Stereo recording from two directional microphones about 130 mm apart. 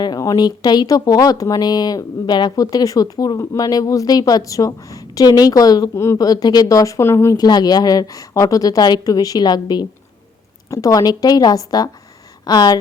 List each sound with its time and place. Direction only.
0.0 s speech: 30° left (ahead or behind)